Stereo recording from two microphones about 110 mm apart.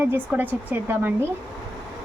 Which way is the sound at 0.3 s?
15° right (ahead or behind).